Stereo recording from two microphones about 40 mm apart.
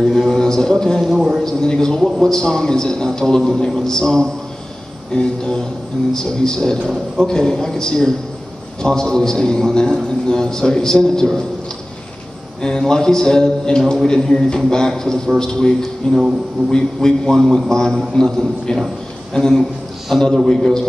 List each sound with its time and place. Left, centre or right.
0.0 s a man's voice: centre
2.0 s a man's voice: centre
2.3 s a man's voice: centre
12.6 s a man's voice: centre